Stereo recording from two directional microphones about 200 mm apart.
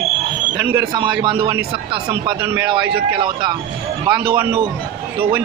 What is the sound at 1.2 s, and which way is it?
Speech, 25° right (ahead or behind).